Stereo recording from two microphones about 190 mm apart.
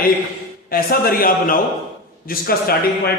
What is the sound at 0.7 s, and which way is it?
A man's voice, 50° left (ahead or behind).